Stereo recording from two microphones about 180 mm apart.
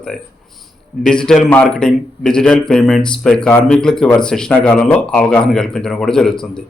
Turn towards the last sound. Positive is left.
turn(degrees=5)  # may be behind; listen again after turning